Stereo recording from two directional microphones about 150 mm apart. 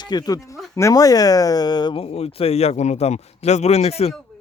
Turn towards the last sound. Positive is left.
turn(degrees=45)  # may be behind; listen again after turning